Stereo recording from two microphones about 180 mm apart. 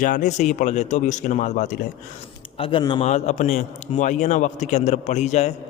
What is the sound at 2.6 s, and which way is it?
A man's voice, 30° left (ahead or behind).